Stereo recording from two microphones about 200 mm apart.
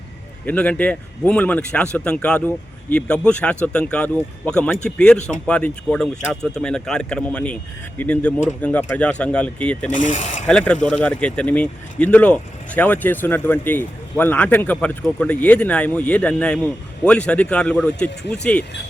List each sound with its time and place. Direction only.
0.4 s speech: 5° left (ahead or behind)
9.9 s speech: 40° left (ahead or behind)
10.4 s speech: 5° left (ahead or behind)